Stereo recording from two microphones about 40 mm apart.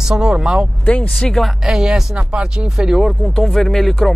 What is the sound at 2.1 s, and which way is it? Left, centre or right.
Speech, right.